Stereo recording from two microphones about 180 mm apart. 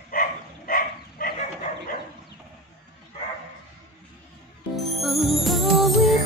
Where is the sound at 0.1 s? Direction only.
50° left (ahead or behind).